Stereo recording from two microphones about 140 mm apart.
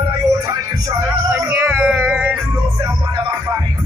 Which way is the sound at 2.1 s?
10° right (ahead or behind).